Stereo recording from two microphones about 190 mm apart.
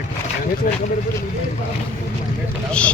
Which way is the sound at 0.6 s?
45° left (ahead or behind).